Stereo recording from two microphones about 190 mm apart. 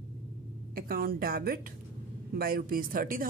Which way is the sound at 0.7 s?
50° right (ahead or behind).